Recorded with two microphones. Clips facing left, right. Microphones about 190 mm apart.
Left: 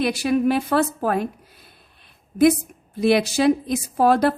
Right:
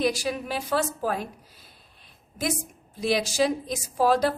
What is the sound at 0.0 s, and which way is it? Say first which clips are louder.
A woman's voice: left 7 dB; 60° left (ahead or behind).